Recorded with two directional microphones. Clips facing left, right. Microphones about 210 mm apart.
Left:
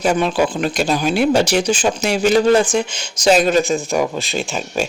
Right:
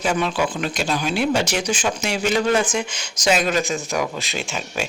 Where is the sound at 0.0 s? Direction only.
40° left (ahead or behind).